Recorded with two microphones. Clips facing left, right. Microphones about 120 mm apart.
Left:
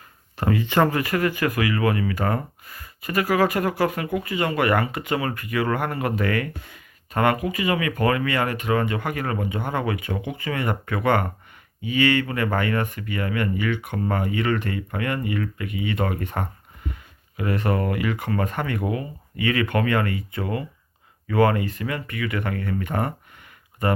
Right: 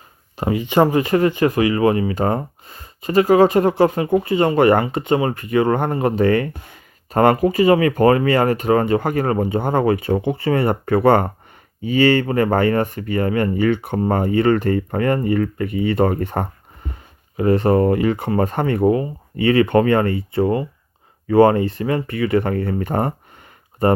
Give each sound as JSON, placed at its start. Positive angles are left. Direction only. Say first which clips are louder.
{"t": 0.3, "sound": "speech", "louder": "right 4 dB", "side_deg": -20}